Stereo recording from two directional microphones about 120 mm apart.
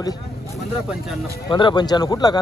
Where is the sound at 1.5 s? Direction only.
40° left (ahead or behind).